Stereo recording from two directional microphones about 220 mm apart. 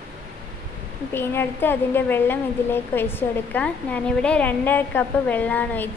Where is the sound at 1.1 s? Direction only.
10° left (ahead or behind).